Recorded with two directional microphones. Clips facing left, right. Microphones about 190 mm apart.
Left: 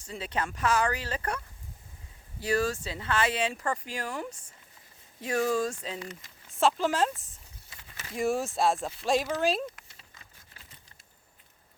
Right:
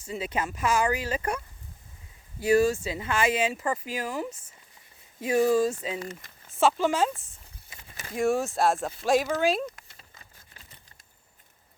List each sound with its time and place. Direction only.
0.0 s speech: 10° right (ahead or behind)
2.4 s speech: 10° right (ahead or behind)
6.0 s speech: 50° right (ahead or behind)
6.5 s speech: centre (ahead or behind)
8.1 s speech: centre (ahead or behind)
9.6 s a sound: 45° right (ahead or behind)